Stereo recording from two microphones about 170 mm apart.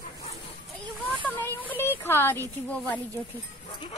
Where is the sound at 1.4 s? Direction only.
10° left (ahead or behind).